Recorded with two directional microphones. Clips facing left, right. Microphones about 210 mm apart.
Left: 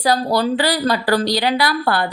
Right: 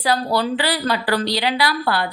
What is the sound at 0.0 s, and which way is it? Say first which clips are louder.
A woman's voice: left 3 dB; 40° left (ahead or behind).